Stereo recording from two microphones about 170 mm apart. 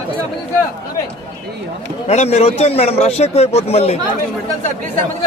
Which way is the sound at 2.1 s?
40° left (ahead or behind).